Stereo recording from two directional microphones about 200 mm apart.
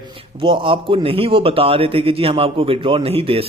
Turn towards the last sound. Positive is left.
turn(degrees=-30)  # may be behind; listen again after turning